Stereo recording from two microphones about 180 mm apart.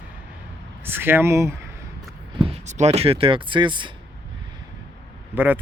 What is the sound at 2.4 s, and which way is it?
Speech, 40° right (ahead or behind).